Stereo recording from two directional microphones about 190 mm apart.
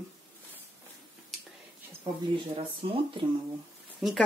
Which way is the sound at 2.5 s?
30° right (ahead or behind).